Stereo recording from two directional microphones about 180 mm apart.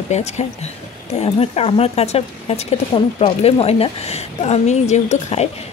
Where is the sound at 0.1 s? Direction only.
40° left (ahead or behind).